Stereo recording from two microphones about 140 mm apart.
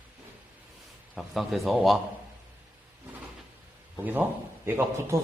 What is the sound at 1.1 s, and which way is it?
Speech, centre (ahead or behind).